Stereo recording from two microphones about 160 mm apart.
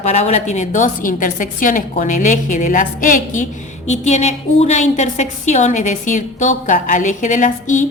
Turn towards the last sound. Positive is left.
turn(degrees=50)  # may be behind; listen again after turning